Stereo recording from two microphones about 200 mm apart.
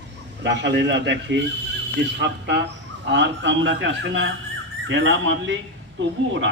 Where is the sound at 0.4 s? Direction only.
60° right (ahead or behind).